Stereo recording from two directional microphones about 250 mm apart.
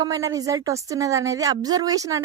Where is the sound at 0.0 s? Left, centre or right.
Centre.